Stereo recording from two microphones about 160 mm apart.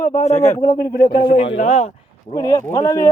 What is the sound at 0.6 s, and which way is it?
Speech, 70° left (ahead or behind).